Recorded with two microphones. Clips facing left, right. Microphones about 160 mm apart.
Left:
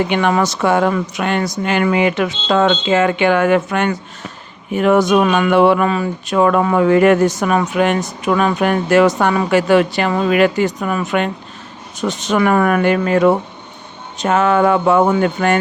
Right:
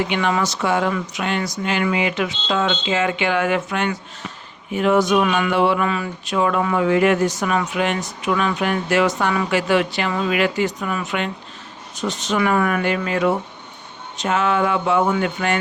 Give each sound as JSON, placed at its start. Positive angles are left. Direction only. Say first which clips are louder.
{"t": 0.1, "sound": "speech", "louder": "left 5 dB", "side_deg": 55}
{"t": 5.8, "sound": "speech", "louder": "left 5 dB", "side_deg": 40}